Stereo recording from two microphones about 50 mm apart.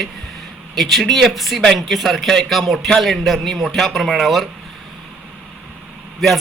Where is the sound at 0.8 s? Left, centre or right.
Centre.